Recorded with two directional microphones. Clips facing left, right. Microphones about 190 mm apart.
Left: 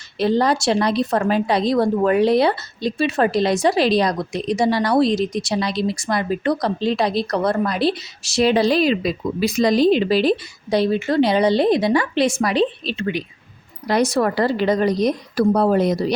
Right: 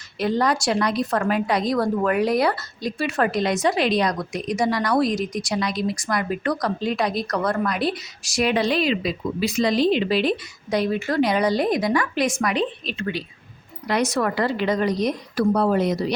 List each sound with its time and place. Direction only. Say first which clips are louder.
0.2 s a woman's voice: left 4 dB; 30° left (ahead or behind)